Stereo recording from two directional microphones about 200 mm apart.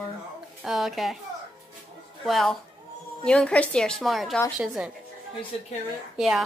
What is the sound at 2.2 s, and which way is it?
A woman's voice, centre (ahead or behind).